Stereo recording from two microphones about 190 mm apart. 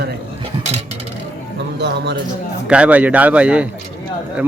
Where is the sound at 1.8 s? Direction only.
60° right (ahead or behind).